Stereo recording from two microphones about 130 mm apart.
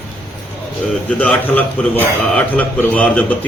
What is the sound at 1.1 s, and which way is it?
A man's voice, 10° left (ahead or behind).